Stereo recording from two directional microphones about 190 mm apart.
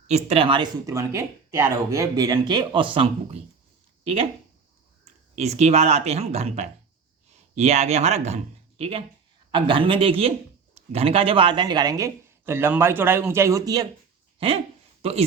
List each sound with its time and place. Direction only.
0.1 s speech: 35° right (ahead or behind)
5.3 s a man's voice: 35° right (ahead or behind); by 13.8 s 20° right (ahead or behind)
14.3 s speech: 30° right (ahead or behind)